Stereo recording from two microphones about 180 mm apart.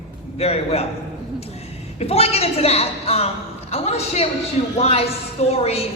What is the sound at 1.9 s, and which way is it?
A woman's voice, 35° left (ahead or behind).